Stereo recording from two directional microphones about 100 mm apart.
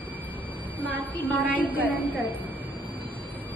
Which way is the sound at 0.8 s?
15° right (ahead or behind).